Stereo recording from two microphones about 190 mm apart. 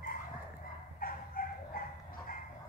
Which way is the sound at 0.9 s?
50° left (ahead or behind).